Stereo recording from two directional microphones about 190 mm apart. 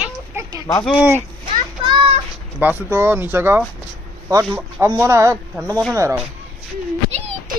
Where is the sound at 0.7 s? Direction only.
15° left (ahead or behind).